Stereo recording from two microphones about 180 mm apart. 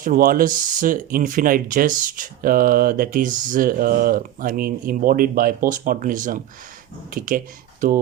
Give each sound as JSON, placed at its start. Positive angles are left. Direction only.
{"t": 0.0, "sound": "speech", "side_deg": -50}